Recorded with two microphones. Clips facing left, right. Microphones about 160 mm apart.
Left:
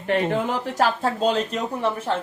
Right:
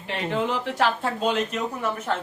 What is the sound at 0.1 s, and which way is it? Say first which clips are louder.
Speech: left 4 dB; 50° left (ahead or behind).